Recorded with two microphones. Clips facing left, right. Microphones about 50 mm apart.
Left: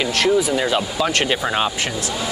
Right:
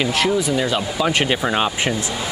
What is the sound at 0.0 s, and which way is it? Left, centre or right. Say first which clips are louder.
Speech: left 1 dB; centre.